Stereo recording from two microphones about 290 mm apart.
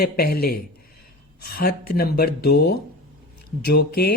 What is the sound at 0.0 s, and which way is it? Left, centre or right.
Speech, left.